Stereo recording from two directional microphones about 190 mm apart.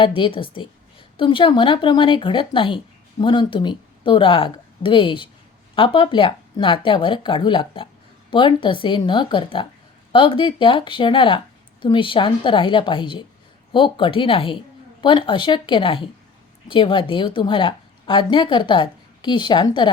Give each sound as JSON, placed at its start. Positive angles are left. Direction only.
{"t": 0.0, "sound": "speech", "side_deg": 25}